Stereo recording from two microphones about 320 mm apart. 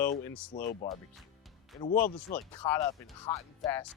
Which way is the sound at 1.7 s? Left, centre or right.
Left.